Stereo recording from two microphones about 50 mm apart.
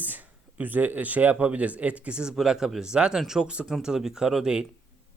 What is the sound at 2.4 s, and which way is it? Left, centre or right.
Speech, centre.